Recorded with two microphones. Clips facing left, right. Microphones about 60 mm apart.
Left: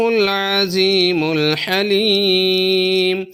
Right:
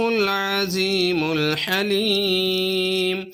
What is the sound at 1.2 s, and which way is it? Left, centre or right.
Mantra, left.